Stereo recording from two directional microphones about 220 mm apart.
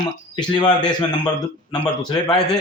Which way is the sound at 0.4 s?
20° left (ahead or behind).